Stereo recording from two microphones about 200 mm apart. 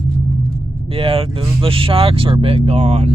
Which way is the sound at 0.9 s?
30° right (ahead or behind).